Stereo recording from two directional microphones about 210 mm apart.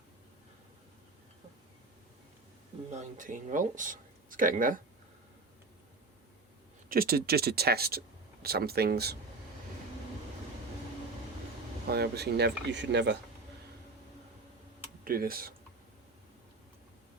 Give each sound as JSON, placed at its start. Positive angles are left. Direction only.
{"t": 2.9, "sound": "speech", "side_deg": -35}
{"t": 6.8, "sound": "speech", "side_deg": -45}
{"t": 11.9, "sound": "speech", "side_deg": -50}
{"t": 15.0, "sound": "speech", "side_deg": -45}